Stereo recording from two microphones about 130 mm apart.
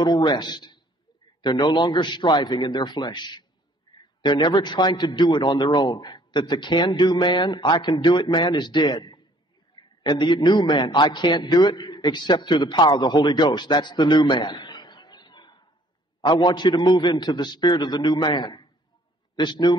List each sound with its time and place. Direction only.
0.0 s a man's voice: 35° left (ahead or behind)
3.9 s a sound: 35° left (ahead or behind)
4.2 s a man's voice: 35° left (ahead or behind)